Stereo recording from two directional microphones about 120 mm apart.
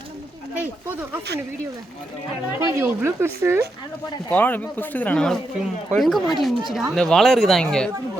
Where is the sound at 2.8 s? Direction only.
20° right (ahead or behind).